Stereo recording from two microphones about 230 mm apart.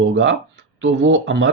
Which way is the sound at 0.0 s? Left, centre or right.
Right.